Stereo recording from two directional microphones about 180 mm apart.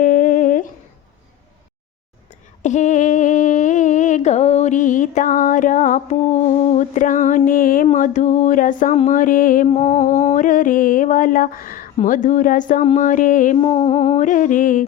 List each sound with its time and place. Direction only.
0.0 s humming: 45° left (ahead or behind)
2.6 s a sound: 40° left (ahead or behind)
6.7 s mantra: 45° left (ahead or behind)
13.6 s mantra: 35° left (ahead or behind)